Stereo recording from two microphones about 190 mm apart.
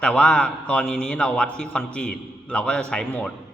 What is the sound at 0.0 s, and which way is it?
Speech, 5° left (ahead or behind).